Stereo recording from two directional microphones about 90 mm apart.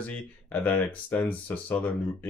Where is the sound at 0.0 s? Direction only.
20° left (ahead or behind).